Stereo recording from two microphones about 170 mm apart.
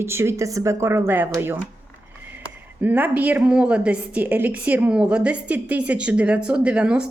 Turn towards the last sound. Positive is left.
turn(degrees=-5)  # may be behind; listen again after turning